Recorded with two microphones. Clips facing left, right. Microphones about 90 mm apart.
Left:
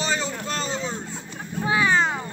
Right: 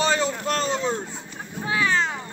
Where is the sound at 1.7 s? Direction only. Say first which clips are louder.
Left 2 dB; 15° left (ahead or behind).